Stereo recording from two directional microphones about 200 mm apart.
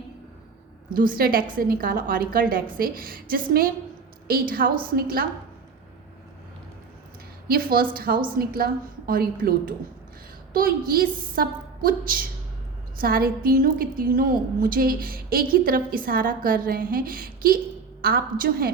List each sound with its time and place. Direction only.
0.9 s a woman's voice: 45° right (ahead or behind)
7.4 s a woman's voice: 50° right (ahead or behind)